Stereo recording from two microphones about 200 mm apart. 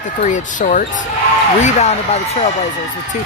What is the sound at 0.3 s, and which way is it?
Speech, 40° left (ahead or behind).